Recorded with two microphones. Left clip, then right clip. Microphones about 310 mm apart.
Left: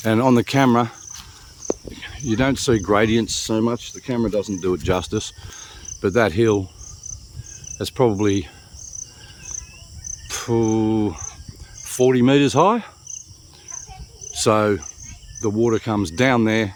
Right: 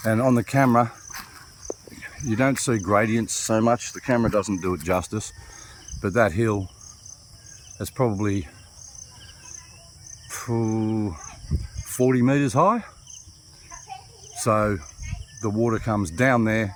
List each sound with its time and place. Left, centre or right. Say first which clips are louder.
0.0 s speech: left 4 dB; centre
1.6 s cricket: left 9 dB; left
2.0 s cricket: left 4 dB; centre
2.3 s speech: left 4 dB; centre
7.8 s speech: left 6 dB; centre
10.3 s speech: left 7 dB; centre
14.4 s speech: left 4 dB; centre